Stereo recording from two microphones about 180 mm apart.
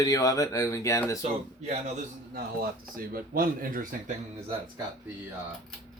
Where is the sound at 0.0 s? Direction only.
20° left (ahead or behind).